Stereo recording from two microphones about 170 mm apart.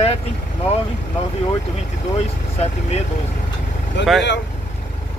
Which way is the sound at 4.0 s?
90° left.